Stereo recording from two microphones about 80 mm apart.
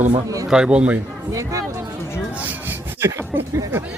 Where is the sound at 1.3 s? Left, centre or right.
Right.